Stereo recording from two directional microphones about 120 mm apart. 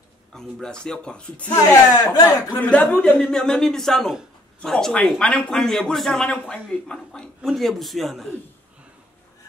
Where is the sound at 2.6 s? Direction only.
10° left (ahead or behind).